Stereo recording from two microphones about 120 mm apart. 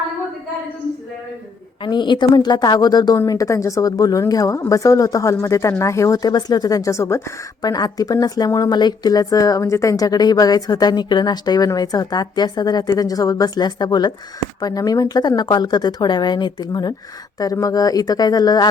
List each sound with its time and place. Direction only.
1.8 s a woman's voice: 40° left (ahead or behind)